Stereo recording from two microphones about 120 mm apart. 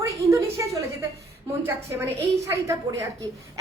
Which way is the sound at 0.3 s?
25° right (ahead or behind).